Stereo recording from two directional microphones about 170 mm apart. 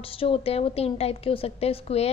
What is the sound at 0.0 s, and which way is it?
A woman's voice, 35° left (ahead or behind).